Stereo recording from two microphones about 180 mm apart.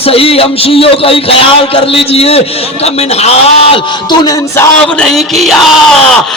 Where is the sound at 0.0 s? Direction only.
35° left (ahead or behind).